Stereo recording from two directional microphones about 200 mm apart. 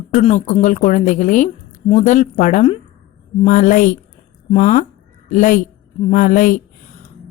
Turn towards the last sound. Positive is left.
turn(degrees=40)  # may be behind; listen again after turning